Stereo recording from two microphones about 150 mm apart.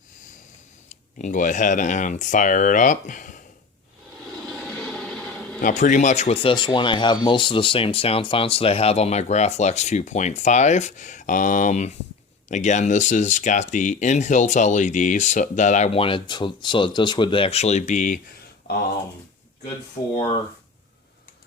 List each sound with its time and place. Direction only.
0.9 s speech: 55° left (ahead or behind)
4.4 s a sound: centre (ahead or behind)
5.6 s speech: 60° left (ahead or behind)